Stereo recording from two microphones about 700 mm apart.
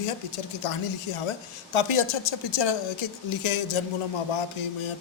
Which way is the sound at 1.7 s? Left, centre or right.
Left.